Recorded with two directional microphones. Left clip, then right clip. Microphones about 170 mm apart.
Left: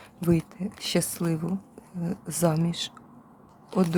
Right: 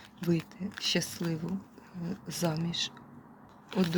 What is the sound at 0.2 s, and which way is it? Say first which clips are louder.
Speech: left 6 dB; 30° left (ahead or behind).